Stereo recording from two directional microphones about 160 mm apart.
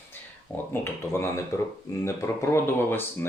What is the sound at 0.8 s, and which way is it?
Speech, 15° left (ahead or behind).